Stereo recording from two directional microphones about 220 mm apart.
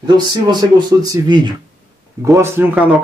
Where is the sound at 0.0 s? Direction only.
20° right (ahead or behind).